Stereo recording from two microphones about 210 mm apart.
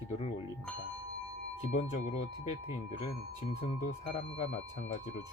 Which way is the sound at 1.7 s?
30° left (ahead or behind).